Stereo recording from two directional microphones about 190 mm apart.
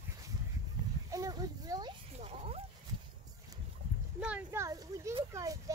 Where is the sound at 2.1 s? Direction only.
30° right (ahead or behind).